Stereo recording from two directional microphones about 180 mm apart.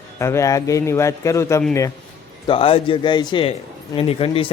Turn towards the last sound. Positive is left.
turn(degrees=35)  # may be behind; listen again after turning